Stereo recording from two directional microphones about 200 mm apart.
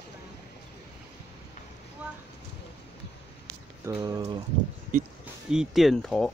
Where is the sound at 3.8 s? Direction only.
15° right (ahead or behind).